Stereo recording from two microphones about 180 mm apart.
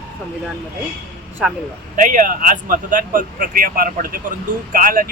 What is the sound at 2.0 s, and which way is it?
Speech, 45° right (ahead or behind).